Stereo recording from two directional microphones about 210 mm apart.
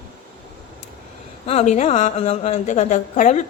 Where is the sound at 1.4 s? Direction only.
30° left (ahead or behind).